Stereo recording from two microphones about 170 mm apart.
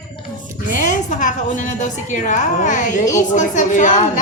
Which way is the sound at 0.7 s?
50° left (ahead or behind).